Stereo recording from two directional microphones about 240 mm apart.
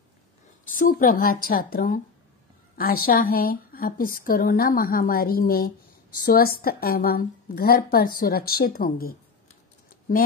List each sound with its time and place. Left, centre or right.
0.7 s a woman's voice: left
3.1 s a woman's voice: left